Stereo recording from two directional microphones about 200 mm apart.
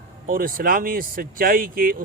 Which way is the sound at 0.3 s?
45° right (ahead or behind).